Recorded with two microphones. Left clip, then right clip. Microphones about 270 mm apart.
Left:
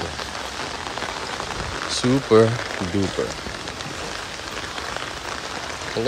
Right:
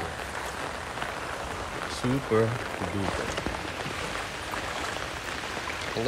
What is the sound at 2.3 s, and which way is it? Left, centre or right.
Speech, centre.